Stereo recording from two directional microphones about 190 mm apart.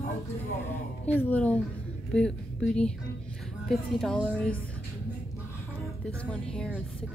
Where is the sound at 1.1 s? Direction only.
10° left (ahead or behind).